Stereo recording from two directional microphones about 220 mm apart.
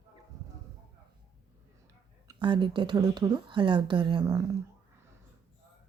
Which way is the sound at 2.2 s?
20° right (ahead or behind).